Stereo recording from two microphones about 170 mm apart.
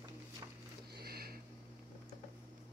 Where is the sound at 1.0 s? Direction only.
65° right (ahead or behind).